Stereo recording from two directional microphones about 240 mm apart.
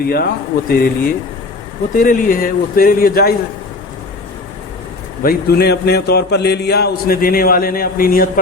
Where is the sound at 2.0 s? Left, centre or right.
Left.